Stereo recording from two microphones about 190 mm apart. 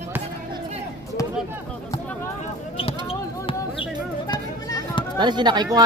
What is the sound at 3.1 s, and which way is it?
Basketball bounce, 30° left (ahead or behind).